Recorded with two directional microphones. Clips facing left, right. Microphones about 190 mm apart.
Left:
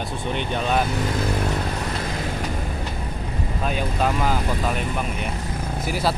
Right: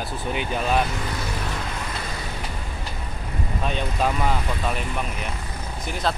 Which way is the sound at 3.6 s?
5° left (ahead or behind).